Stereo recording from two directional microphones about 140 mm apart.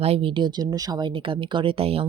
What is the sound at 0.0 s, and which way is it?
Speech, 40° right (ahead or behind).